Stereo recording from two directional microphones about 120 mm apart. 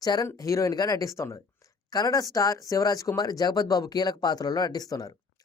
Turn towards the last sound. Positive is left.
turn(degrees=30)  # may be behind; listen again after turning